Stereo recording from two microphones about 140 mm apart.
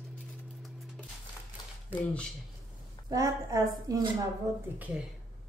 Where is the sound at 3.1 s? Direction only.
25° right (ahead or behind).